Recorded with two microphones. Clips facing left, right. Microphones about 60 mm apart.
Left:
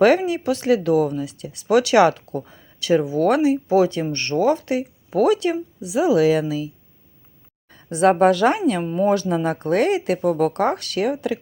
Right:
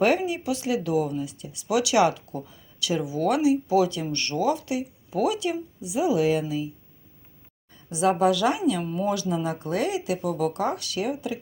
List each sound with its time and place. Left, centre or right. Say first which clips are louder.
0.0 s speech: left 6 dB; left
7.7 s a woman's voice: left 6 dB; left